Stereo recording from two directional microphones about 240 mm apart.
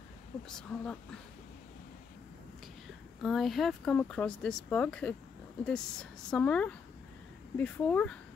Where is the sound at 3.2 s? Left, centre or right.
Centre.